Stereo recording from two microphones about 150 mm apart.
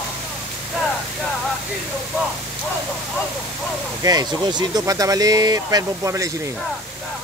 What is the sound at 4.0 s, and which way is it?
Speech, 25° right (ahead or behind).